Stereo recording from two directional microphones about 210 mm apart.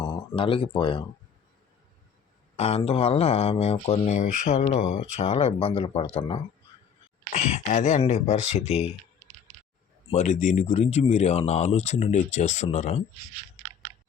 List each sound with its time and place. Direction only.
0.0 s speech: 20° left (ahead or behind)
2.6 s speech: 30° left (ahead or behind)
10.1 s speech: 35° left (ahead or behind)